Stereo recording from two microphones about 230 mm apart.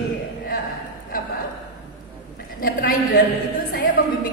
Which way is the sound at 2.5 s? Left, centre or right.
Left.